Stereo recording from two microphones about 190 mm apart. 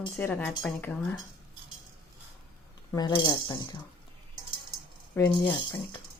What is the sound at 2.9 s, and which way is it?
Speech, 20° left (ahead or behind).